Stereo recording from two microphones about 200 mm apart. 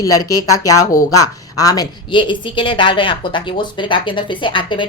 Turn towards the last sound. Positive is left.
turn(degrees=25)  # may be behind; listen again after turning